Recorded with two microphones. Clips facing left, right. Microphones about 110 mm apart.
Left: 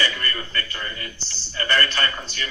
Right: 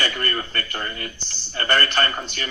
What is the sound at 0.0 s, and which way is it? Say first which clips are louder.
A man's voice: right 1 dB; 50° right (ahead or behind).